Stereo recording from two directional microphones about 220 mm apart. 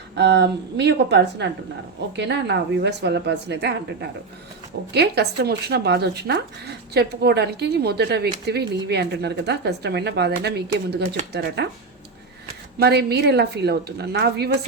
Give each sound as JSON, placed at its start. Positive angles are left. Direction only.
{"t": 0.2, "sound": "speech", "side_deg": -50}
{"t": 4.9, "sound": "speech", "side_deg": -50}
{"t": 12.8, "sound": "speech", "side_deg": -50}